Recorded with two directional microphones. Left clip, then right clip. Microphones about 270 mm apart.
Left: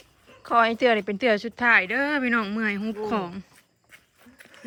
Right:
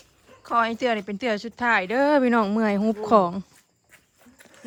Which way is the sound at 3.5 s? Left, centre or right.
Centre.